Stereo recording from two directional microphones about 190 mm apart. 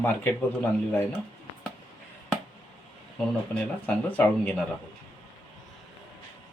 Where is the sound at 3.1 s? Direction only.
10° left (ahead or behind).